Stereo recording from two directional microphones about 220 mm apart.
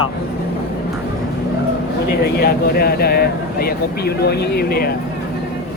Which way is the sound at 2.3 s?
45° left (ahead or behind).